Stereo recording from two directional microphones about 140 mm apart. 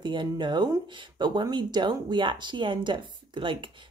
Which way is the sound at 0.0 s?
35° right (ahead or behind).